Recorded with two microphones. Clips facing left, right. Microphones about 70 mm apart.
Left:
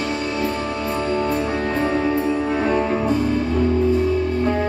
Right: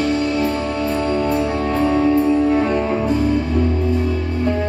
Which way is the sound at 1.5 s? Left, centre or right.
Left.